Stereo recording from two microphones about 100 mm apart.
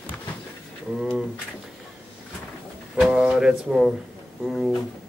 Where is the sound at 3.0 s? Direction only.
5° right (ahead or behind).